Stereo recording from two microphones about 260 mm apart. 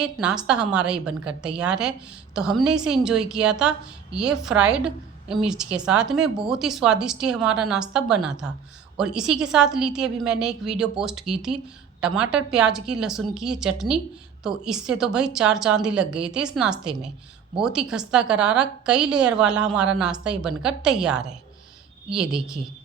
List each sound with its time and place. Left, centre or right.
0.0 s a woman's voice: centre